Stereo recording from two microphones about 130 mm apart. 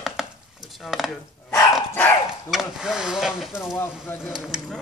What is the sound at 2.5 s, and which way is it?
Speech, 5° right (ahead or behind).